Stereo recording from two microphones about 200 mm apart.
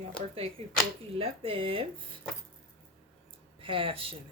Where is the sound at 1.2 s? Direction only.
25° right (ahead or behind).